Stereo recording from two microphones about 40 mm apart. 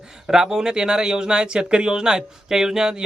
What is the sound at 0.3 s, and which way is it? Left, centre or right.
Speech, centre.